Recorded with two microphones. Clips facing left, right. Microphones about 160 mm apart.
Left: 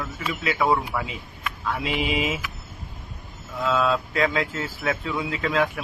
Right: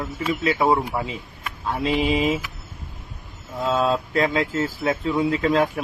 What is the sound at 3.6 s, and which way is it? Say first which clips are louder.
Speech: right 1 dB; 35° right (ahead or behind).